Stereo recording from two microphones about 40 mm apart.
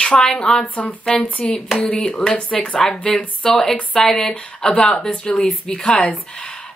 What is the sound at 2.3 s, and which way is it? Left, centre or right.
Speech, left.